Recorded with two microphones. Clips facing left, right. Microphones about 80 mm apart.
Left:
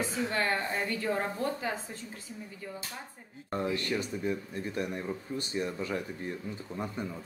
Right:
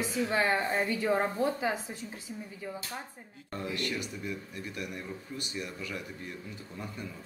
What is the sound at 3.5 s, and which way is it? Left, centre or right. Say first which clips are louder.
Speech: left 4 dB; left.